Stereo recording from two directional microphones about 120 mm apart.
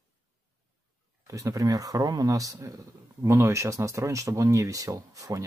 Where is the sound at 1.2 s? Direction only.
30° right (ahead or behind).